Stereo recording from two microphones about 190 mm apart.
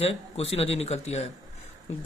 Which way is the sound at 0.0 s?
30° left (ahead or behind).